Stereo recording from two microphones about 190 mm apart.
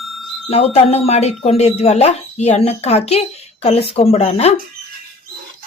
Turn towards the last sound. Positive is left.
turn(degrees=35)  # may be behind; listen again after turning